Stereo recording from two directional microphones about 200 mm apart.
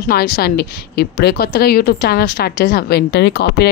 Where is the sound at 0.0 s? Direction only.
50° left (ahead or behind).